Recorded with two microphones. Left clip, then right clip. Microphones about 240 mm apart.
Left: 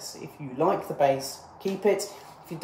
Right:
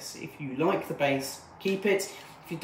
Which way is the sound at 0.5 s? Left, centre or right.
Centre.